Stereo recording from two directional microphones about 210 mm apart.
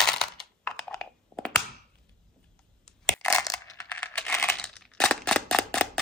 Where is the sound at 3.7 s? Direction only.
5° left (ahead or behind).